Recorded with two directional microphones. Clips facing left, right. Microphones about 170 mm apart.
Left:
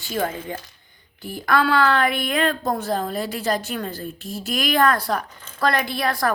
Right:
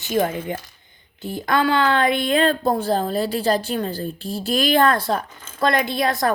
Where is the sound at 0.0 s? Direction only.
20° right (ahead or behind).